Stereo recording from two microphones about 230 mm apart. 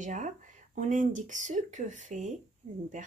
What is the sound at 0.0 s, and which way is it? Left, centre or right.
Speech, right.